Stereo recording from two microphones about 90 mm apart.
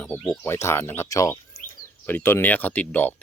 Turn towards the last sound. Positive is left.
turn(degrees=20)  # may be behind; listen again after turning